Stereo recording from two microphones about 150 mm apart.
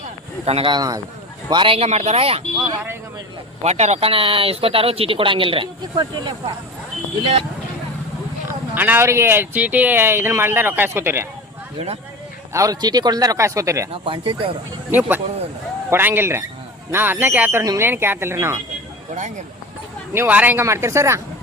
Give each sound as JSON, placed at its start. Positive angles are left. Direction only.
{"t": 0.4, "sound": "speech", "side_deg": -40}
{"t": 3.6, "sound": "speech", "side_deg": -45}
{"t": 8.4, "sound": "speech", "side_deg": -10}
{"t": 12.5, "sound": "speech", "side_deg": -25}
{"t": 13.9, "sound": "speech", "side_deg": -35}
{"t": 14.8, "sound": "speech", "side_deg": -10}
{"t": 20.1, "sound": "speech", "side_deg": -10}